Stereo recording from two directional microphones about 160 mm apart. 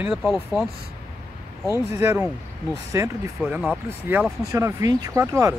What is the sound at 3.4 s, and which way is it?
Speech, 10° right (ahead or behind).